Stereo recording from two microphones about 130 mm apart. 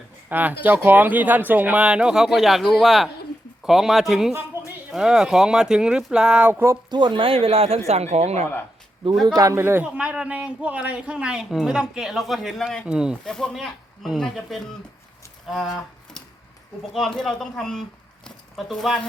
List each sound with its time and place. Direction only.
0.3 s a man's voice: 15° right (ahead or behind)
6.9 s speech: 40° right (ahead or behind); by 8.4 s 60° right (ahead or behind)
9.2 s a man's voice: 30° right (ahead or behind); by 14.6 s centre (ahead or behind)
15.4 s a sound: centre (ahead or behind)
17.2 s speech: 5° left (ahead or behind)